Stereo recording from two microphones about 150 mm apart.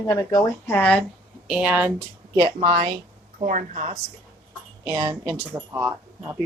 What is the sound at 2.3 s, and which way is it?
Speech, 40° right (ahead or behind).